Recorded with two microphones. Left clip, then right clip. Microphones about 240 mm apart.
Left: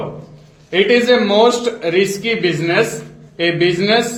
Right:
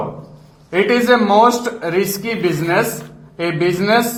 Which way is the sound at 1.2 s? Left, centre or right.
Right.